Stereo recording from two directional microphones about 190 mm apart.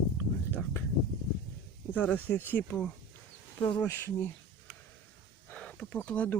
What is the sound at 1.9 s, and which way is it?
Speech, 5° left (ahead or behind).